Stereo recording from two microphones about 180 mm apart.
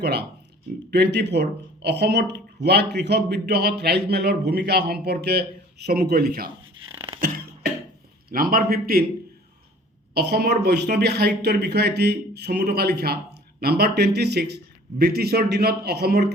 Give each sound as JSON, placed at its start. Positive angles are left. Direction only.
{"t": 0.0, "sound": "speech", "side_deg": -65}
{"t": 7.2, "sound": "beatboxing", "side_deg": -60}
{"t": 8.3, "sound": "speech", "side_deg": -55}
{"t": 10.2, "sound": "speech", "side_deg": -65}